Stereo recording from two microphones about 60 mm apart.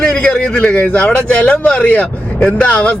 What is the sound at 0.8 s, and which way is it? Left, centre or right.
Speech, left.